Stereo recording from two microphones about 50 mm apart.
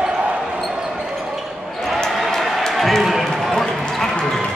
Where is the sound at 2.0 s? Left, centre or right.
Centre.